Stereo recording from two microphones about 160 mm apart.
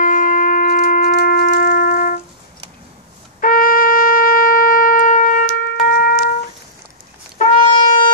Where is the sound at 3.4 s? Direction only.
60° left (ahead or behind).